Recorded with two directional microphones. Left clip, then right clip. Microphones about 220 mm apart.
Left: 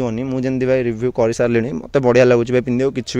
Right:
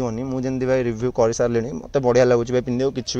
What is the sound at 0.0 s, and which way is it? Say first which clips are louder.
Speech: left 4 dB; 45° left (ahead or behind).